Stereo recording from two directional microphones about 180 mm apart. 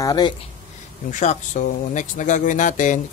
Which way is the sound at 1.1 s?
40° left (ahead or behind).